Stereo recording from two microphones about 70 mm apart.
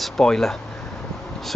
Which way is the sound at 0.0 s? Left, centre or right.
Centre.